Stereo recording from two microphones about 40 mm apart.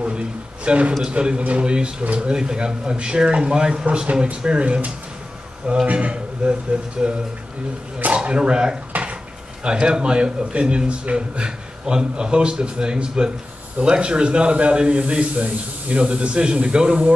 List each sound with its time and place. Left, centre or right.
0.0 s a man's voice: right
8.1 s a man's voice: right
8.9 s dishes: right
9.6 s a man's voice: right